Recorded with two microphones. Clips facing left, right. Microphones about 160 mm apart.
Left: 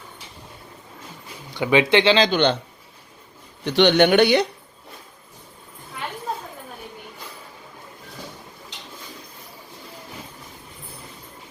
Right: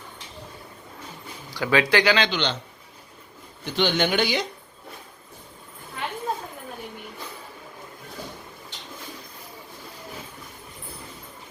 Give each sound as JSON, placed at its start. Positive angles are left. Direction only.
{"t": 1.5, "sound": "speech", "side_deg": 20}
{"t": 2.3, "sound": "speech", "side_deg": 55}
{"t": 3.6, "sound": "speech", "side_deg": 70}